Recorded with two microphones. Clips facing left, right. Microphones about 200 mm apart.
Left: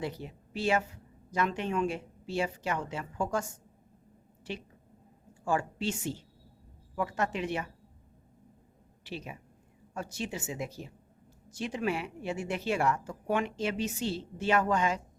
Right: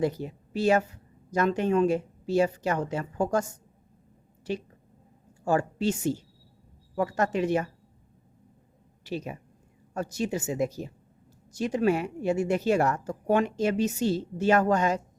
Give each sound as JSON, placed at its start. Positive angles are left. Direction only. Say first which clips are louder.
{"t": 0.0, "sound": "a woman's voice", "louder": "right 9 dB", "side_deg": -40}
{"t": 4.5, "sound": "a woman's voice", "louder": "right 8 dB", "side_deg": -40}
{"t": 9.0, "sound": "a woman's voice", "louder": "right 7 dB", "side_deg": -45}